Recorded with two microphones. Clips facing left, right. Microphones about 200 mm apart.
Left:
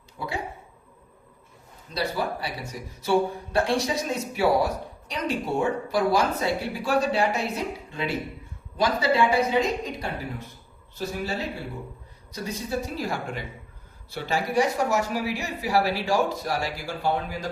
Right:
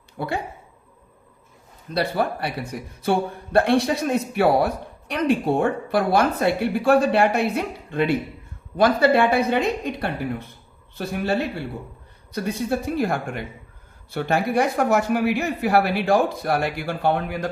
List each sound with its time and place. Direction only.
0.2 s speech: 65° right (ahead or behind)
1.9 s speech: 55° right (ahead or behind)